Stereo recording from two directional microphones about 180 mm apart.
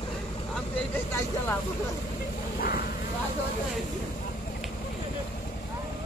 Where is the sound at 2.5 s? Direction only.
55° left (ahead or behind).